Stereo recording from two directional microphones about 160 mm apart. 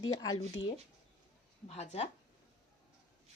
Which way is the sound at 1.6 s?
45° left (ahead or behind).